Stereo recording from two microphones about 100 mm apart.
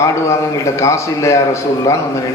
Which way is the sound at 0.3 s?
30° left (ahead or behind).